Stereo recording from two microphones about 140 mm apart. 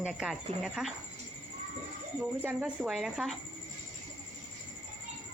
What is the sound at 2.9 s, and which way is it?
Speech, centre (ahead or behind).